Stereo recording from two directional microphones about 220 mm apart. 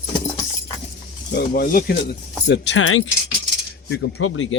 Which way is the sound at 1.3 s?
40° left (ahead or behind).